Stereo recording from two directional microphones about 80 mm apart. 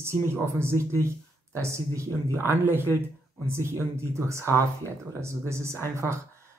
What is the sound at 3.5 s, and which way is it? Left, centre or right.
Speech, right.